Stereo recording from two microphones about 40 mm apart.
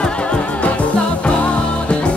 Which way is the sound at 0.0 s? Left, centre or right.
Left.